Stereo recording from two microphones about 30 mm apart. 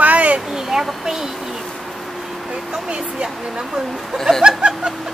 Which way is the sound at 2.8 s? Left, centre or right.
Right.